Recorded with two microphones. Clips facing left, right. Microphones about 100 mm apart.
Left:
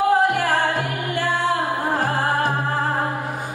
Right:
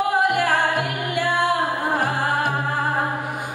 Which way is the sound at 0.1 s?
15° right (ahead or behind).